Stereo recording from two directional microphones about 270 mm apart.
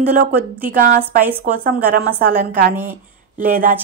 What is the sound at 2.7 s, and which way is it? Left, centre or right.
Speech, centre.